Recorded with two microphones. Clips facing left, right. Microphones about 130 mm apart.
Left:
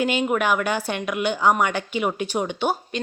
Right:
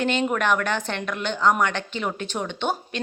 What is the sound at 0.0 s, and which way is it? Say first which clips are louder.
A woman's voice: left 1 dB; 10° left (ahead or behind).